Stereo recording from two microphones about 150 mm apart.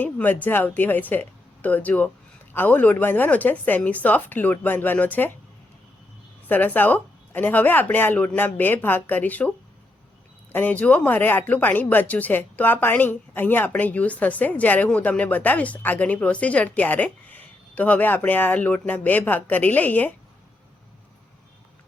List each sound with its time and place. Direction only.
0.0 s speech: 10° left (ahead or behind)
6.5 s speech: 10° left (ahead or behind)
10.5 s speech: 10° left (ahead or behind)